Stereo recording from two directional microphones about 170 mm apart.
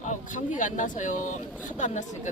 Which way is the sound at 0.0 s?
45° left (ahead or behind).